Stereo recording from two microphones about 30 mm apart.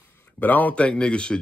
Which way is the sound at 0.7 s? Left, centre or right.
Left.